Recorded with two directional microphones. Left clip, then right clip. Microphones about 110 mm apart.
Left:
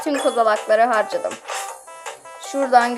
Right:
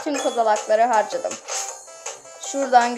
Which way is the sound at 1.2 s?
25° right (ahead or behind).